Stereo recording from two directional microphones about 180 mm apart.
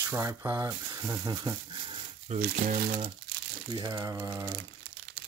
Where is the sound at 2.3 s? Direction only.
50° right (ahead or behind).